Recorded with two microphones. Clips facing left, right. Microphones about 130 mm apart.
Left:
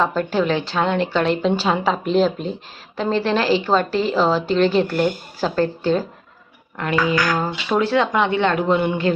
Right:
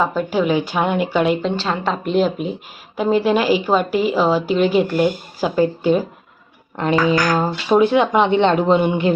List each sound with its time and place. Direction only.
0.0 s a woman's voice: 10° right (ahead or behind)
7.3 s speech: 20° right (ahead or behind)